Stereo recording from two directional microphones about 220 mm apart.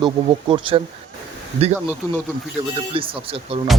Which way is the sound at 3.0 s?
25° right (ahead or behind).